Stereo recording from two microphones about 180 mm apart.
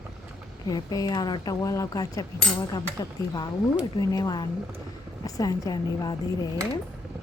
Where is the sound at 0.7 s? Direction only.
20° left (ahead or behind).